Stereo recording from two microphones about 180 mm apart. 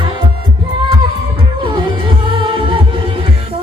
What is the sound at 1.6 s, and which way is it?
Music, 25° right (ahead or behind).